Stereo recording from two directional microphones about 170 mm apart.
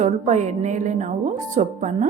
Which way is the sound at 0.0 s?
45° right (ahead or behind).